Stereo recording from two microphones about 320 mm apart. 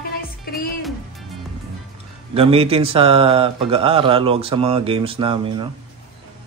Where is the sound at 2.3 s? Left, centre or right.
Centre.